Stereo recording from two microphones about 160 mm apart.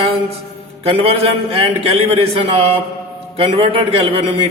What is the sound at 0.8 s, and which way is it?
Speech, 40° right (ahead or behind).